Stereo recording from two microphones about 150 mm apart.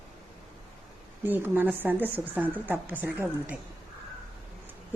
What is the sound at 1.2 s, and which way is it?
A woman's voice, 15° right (ahead or behind).